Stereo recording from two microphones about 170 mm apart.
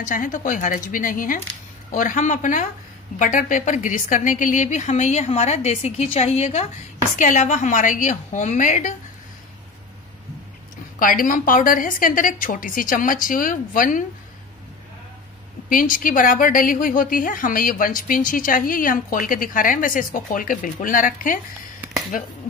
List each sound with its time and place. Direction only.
0.0 s a woman's voice: 50° left (ahead or behind)
11.0 s a woman's voice: 55° left (ahead or behind)
15.7 s a woman's voice: 55° left (ahead or behind)